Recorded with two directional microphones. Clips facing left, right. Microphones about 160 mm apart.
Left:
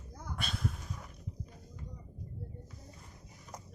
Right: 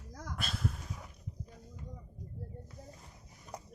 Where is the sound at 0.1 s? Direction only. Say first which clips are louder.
Right 1 dB; 90° right.